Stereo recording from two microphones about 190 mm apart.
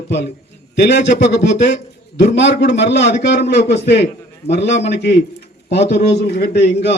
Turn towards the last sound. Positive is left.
turn(degrees=60)  # may be behind; listen again after turning